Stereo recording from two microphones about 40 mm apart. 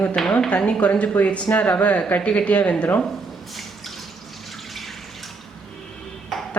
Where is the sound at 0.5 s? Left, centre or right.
Left.